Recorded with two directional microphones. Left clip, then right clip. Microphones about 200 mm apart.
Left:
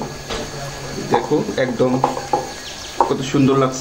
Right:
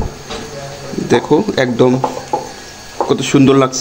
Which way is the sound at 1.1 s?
50° right (ahead or behind).